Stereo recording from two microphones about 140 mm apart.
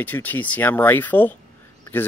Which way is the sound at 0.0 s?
10° left (ahead or behind).